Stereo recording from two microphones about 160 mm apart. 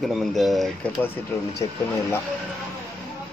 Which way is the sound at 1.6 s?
25° left (ahead or behind).